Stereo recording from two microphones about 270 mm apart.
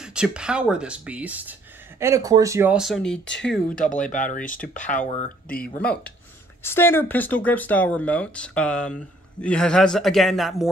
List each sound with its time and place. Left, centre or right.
0.0 s speech: centre
3.3 s speech: left
3.6 s speech: left
6.6 s speech: centre